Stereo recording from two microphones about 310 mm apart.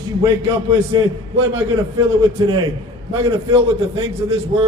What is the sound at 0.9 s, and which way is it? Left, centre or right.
Speech, centre.